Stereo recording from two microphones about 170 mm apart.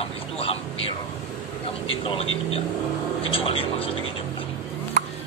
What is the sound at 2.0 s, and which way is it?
Speech, 35° left (ahead or behind).